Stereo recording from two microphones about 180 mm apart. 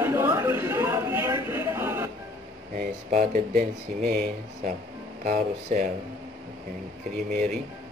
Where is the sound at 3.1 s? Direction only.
50° right (ahead or behind).